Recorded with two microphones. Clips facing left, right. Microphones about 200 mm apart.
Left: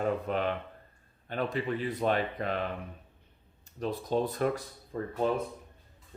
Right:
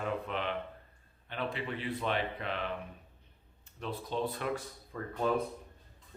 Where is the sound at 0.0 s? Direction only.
40° left (ahead or behind).